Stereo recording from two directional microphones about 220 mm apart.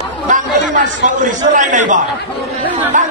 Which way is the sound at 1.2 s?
35° right (ahead or behind).